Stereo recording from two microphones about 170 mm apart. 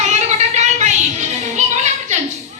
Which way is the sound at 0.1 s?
40° right (ahead or behind).